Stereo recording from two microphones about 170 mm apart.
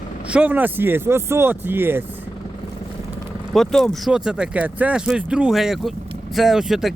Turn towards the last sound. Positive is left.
turn(degrees=0)  # may be behind; listen again after turning